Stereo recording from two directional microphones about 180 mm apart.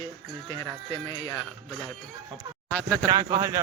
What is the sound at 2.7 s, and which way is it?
Speech, 5° left (ahead or behind).